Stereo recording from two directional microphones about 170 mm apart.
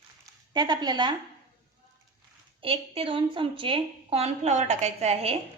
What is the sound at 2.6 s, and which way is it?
A woman's voice, 30° right (ahead or behind).